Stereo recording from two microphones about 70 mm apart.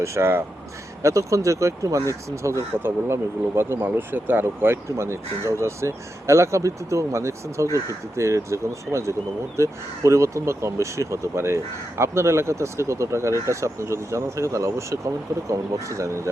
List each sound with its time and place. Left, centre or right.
0.0 s speech: right
1.0 s speech: right